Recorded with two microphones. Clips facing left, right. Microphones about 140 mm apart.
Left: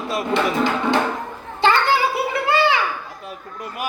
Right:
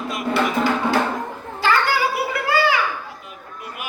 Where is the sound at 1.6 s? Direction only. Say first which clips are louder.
Left 2 dB; 25° left (ahead or behind).